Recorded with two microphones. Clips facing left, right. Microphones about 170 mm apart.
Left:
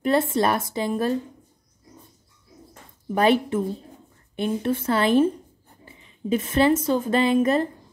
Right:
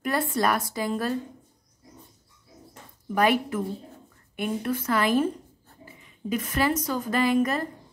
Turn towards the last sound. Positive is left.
turn(degrees=25)  # may be behind; listen again after turning